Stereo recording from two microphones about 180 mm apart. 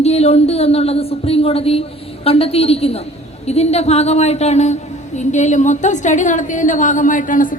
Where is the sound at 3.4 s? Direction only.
35° left (ahead or behind).